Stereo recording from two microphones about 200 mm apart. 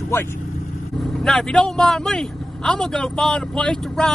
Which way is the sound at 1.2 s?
5° left (ahead or behind).